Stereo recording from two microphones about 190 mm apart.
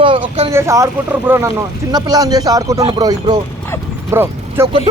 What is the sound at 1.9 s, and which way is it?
Speech, 20° right (ahead or behind).